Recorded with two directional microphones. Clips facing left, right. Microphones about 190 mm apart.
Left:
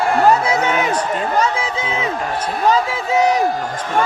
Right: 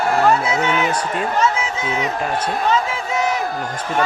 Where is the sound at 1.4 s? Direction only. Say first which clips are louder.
Left 1 dB; 35° left (ahead or behind).